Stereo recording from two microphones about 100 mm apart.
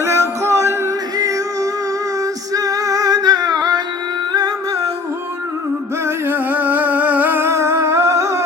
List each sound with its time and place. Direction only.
0.0 s music: 30° right (ahead or behind)
2.5 s music: 35° right (ahead or behind)
6.1 s a sound: 20° right (ahead or behind)